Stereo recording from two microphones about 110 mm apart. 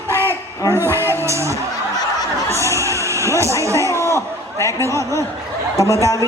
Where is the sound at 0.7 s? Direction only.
25° right (ahead or behind).